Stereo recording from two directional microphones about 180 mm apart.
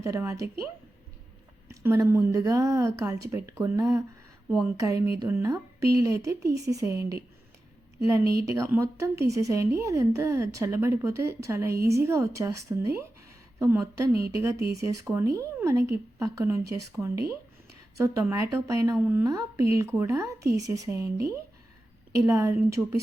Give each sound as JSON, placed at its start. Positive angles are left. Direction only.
{"t": 0.0, "sound": "a woman's voice", "side_deg": -15}
{"t": 1.6, "sound": "a woman's voice", "side_deg": -15}
{"t": 4.4, "sound": "speech", "side_deg": 0}
{"t": 4.8, "sound": "a woman's voice", "side_deg": -20}
{"t": 8.4, "sound": "a woman's voice", "side_deg": -15}
{"t": 22.1, "sound": "a woman's voice", "side_deg": -15}